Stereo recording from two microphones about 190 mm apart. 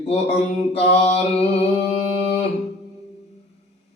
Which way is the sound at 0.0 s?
35° left (ahead or behind).